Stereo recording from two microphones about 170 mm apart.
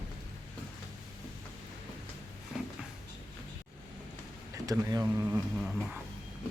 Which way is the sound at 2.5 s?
Centre (ahead or behind).